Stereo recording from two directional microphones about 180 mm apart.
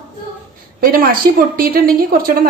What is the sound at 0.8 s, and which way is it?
A woman's voice, 55° right (ahead or behind).